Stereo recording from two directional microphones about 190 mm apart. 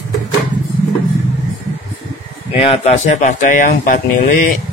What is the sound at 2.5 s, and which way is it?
Speech, 30° left (ahead or behind).